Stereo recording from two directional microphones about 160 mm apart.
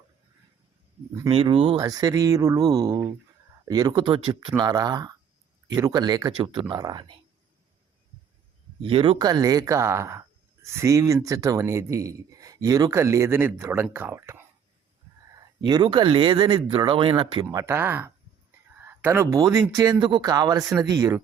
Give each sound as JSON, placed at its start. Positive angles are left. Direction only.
{"t": 1.3, "sound": "speech", "side_deg": -35}
{"t": 8.8, "sound": "speech", "side_deg": -35}
{"t": 15.6, "sound": "speech", "side_deg": -25}